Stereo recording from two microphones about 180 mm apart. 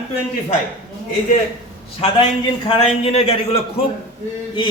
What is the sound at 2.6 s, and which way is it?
A man's voice, 30° left (ahead or behind).